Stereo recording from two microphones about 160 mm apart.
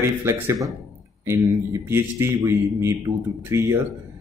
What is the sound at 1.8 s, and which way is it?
Speech, 15° right (ahead or behind).